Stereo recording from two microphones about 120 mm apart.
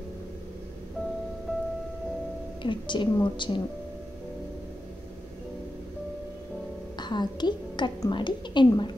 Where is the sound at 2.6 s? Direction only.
40° left (ahead or behind).